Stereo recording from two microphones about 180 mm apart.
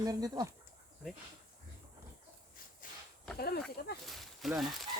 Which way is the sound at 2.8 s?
50° left (ahead or behind).